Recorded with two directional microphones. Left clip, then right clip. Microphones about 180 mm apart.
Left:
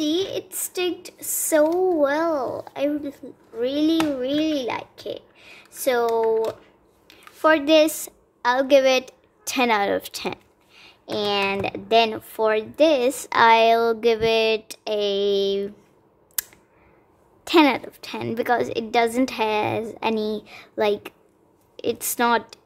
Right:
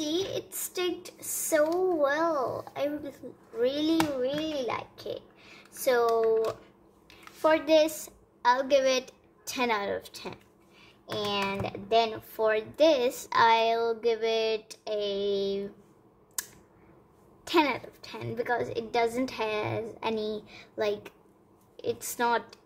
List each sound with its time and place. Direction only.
0.0 s a child's voice: 30° left (ahead or behind)
17.5 s speech: 35° left (ahead or behind)